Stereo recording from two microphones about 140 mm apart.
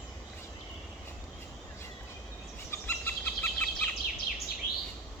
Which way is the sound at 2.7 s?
15° left (ahead or behind).